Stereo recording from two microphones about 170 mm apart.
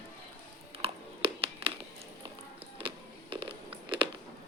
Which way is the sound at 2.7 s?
30° right (ahead or behind).